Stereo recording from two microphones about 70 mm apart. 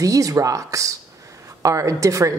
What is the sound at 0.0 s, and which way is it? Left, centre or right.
Speech, right.